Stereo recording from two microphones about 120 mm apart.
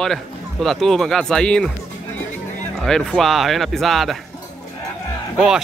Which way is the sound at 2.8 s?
5° left (ahead or behind).